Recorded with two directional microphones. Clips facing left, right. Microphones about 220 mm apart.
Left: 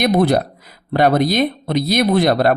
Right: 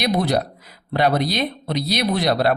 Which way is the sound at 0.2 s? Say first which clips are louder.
Left 5 dB; 50° left (ahead or behind).